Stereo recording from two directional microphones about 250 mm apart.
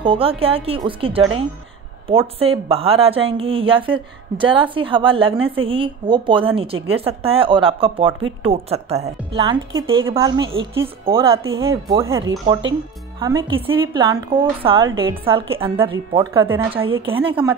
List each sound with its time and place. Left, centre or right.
0.0 s a woman's voice: right
13.2 s a woman's voice: centre
16.2 s speech: centre
16.7 s a woman's voice: right